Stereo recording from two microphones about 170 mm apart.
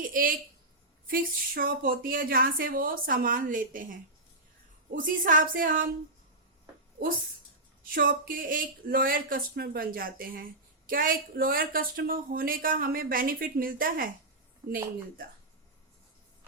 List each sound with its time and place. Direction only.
0.1 s speech: 55° right (ahead or behind)
4.9 s a woman's voice: 50° right (ahead or behind)
7.9 s speech: 60° right (ahead or behind)